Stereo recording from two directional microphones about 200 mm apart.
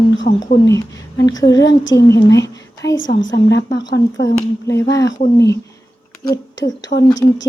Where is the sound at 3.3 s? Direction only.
20° left (ahead or behind).